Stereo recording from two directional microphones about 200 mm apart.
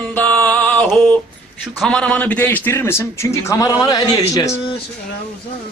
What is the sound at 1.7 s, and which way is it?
A man's voice, centre (ahead or behind).